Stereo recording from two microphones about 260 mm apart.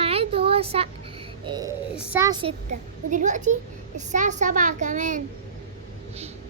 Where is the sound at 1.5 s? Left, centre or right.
Centre.